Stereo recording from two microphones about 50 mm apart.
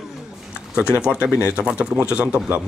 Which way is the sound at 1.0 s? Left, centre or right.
Right.